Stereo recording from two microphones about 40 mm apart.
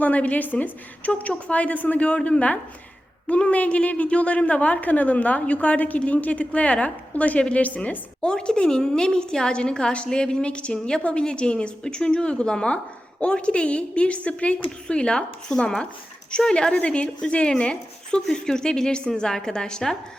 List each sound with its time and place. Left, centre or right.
0.0 s a woman's voice: left
2.0 s a woman's voice: left; by 20.0 s centre